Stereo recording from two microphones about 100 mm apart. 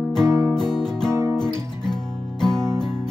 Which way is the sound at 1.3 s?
5° left (ahead or behind).